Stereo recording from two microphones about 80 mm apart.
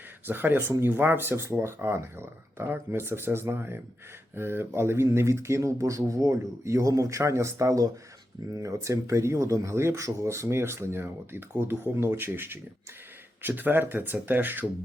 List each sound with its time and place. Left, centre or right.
0.3 s speech: right